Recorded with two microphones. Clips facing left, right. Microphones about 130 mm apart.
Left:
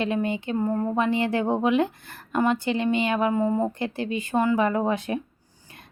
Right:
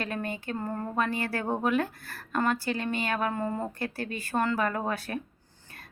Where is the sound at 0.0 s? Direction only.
20° left (ahead or behind).